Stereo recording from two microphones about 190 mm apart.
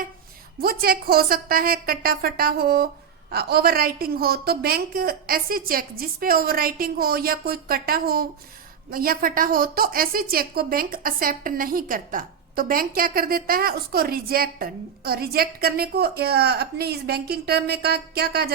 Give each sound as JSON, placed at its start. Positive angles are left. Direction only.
{"t": 0.6, "sound": "a woman's voice", "side_deg": -50}